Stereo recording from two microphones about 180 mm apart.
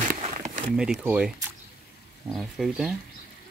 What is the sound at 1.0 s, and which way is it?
Speech, 5° right (ahead or behind).